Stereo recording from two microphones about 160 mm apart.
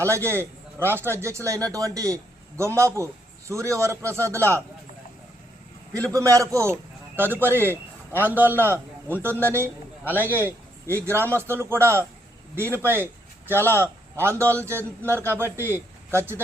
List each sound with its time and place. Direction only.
0.0 s a man's voice: 15° right (ahead or behind)
6.1 s a man's voice: 20° right (ahead or behind)
13.8 s a man's voice: 15° right (ahead or behind)